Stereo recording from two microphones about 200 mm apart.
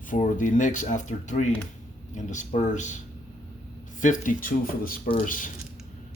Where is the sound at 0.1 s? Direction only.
40° left (ahead or behind).